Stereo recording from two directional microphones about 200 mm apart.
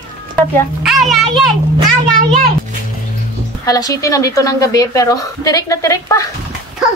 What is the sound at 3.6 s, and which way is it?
A woman's voice, 15° left (ahead or behind).